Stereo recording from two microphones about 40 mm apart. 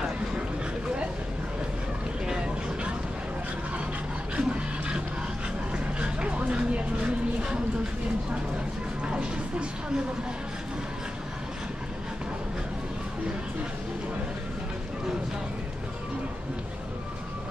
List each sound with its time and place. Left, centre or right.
2.2 s vehicle: right
4.4 s dog: right
5.9 s a sound: right
9.0 s music: right